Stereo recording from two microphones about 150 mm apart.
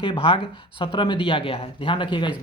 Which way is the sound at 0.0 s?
35° left (ahead or behind).